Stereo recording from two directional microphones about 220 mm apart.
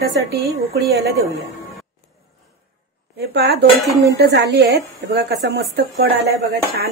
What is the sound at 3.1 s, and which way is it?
A woman's voice, 45° right (ahead or behind).